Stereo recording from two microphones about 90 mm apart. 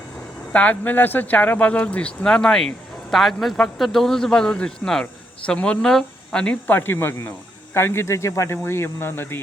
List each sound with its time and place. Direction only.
0.5 s speech: 15° left (ahead or behind)